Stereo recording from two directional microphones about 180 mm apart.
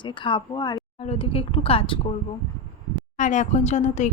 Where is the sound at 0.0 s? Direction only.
25° left (ahead or behind).